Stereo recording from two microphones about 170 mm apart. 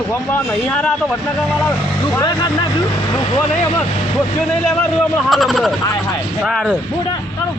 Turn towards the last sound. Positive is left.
turn(degrees=0)  # may be behind; listen again after turning